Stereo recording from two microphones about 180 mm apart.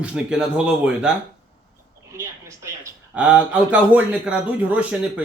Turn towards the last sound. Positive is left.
turn(degrees=-5)  # may be behind; listen again after turning